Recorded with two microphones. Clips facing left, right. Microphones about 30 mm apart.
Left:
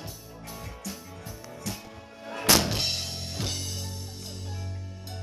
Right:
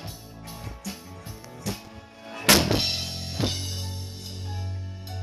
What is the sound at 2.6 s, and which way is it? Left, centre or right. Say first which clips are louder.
Music: right 4 dB; centre.